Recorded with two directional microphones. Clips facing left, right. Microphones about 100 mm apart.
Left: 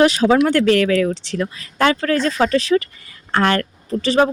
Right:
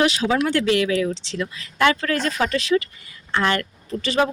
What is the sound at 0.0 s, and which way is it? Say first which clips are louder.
Speech: left 6 dB; 40° left (ahead or behind).